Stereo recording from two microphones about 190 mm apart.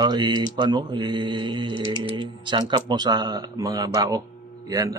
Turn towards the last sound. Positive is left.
turn(degrees=-15)  # may be behind; listen again after turning